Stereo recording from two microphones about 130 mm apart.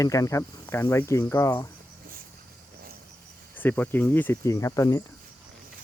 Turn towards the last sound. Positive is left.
turn(degrees=25)  # may be behind; listen again after turning